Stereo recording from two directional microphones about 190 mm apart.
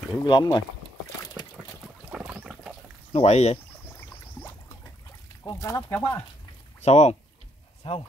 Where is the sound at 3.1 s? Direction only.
35° left (ahead or behind).